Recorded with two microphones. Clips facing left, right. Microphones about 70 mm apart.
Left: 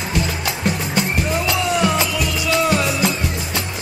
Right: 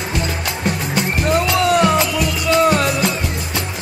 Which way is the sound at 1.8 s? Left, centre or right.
Centre.